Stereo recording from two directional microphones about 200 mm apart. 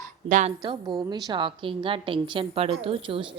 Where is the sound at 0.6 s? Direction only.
20° right (ahead or behind).